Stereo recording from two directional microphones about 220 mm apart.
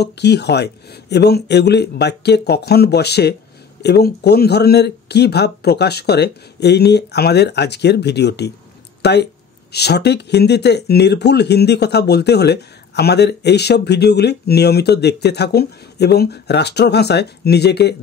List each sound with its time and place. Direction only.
0.0 s speech: 50° left (ahead or behind)